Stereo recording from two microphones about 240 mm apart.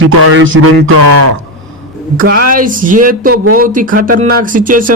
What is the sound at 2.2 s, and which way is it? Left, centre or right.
Speech, right.